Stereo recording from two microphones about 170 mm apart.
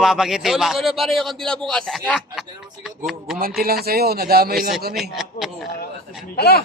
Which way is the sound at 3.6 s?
65° right (ahead or behind).